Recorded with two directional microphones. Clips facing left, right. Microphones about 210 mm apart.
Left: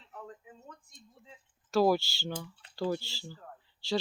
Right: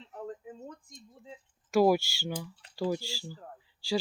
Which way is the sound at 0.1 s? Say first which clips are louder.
Right 6 dB; 40° right (ahead or behind).